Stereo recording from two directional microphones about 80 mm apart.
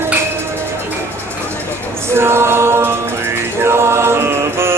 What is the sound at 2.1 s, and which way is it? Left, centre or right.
A capella, right.